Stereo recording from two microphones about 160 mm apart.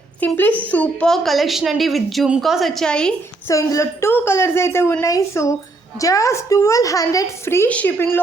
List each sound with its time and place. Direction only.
0.2 s a woman's voice: 10° left (ahead or behind)
3.5 s a woman's voice: 20° left (ahead or behind)